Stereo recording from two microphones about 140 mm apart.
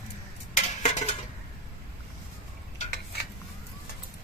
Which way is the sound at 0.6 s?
55° left (ahead or behind).